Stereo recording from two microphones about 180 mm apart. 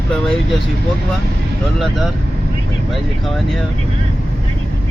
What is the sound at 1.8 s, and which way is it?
Speech, centre (ahead or behind).